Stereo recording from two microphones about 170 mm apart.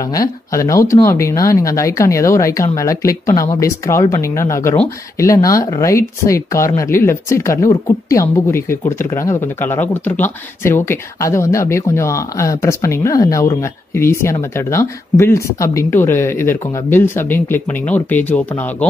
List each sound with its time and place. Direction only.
0.0 s speech: 20° left (ahead or behind)